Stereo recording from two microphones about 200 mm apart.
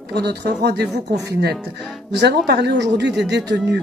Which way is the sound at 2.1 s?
55° right (ahead or behind).